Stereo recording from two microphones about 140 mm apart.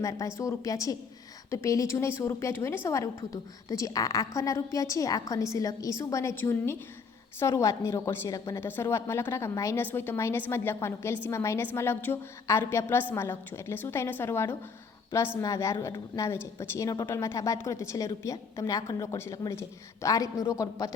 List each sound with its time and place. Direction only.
0.0 s a woman's voice: 25° left (ahead or behind)